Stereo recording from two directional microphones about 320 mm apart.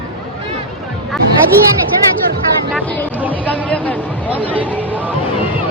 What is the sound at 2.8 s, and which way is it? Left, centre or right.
Speech, centre.